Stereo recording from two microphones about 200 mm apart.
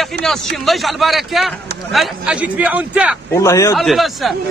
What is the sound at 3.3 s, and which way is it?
Speech, 15° left (ahead or behind).